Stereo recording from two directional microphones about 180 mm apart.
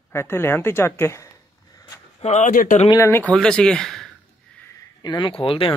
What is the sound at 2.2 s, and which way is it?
Speech, 40° left (ahead or behind).